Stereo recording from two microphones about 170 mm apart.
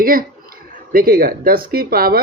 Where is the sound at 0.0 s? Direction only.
55° right (ahead or behind).